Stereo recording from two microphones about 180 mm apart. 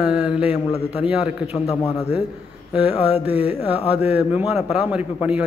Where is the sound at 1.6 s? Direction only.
15° left (ahead or behind).